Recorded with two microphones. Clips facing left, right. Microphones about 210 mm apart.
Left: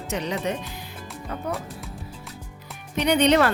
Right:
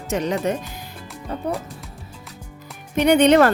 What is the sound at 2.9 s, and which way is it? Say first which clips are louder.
Speech: right 5 dB; 50° right (ahead or behind).